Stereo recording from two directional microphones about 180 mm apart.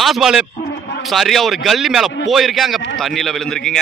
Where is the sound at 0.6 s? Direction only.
75° left (ahead or behind).